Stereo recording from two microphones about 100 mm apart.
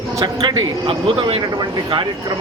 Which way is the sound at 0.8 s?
70° right (ahead or behind).